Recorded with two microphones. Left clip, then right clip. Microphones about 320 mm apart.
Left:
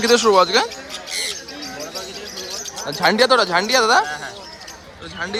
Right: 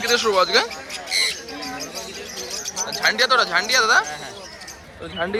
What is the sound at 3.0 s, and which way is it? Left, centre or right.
Speech, left.